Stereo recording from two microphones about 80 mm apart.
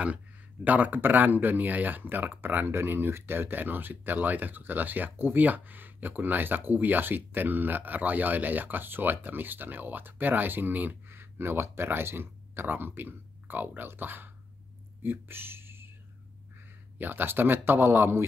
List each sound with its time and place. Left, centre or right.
0.7 s speech: right
17.0 s speech: right